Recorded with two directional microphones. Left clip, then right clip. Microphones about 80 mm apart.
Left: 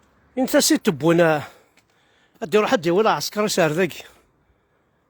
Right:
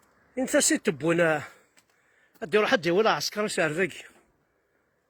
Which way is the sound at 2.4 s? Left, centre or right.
Left.